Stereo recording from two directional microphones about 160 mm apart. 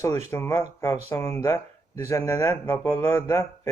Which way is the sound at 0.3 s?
15° left (ahead or behind).